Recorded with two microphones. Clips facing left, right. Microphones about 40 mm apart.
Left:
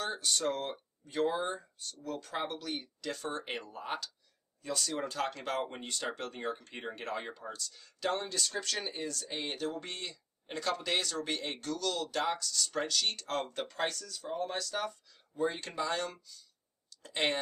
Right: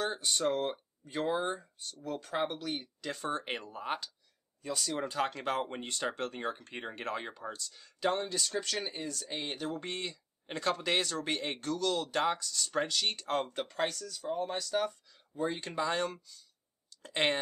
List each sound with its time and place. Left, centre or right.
0.0 s speech: centre
6.8 s speech: centre
9.8 s speech: centre
15.6 s speech: centre